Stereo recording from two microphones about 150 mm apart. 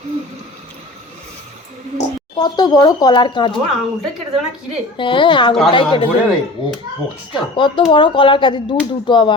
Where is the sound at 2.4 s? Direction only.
30° left (ahead or behind).